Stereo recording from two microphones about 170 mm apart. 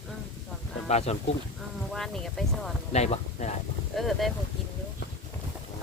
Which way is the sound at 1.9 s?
Centre (ahead or behind).